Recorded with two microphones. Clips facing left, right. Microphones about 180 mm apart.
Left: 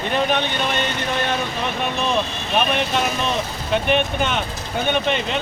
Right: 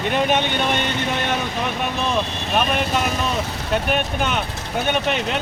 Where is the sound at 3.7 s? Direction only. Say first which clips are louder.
Left 2 dB; 5° right (ahead or behind).